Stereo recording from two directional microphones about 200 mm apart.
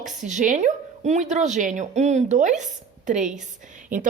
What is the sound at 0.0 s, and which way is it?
A woman's voice, 35° right (ahead or behind).